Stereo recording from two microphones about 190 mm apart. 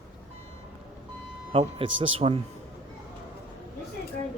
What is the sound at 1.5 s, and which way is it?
Speech, 30° right (ahead or behind).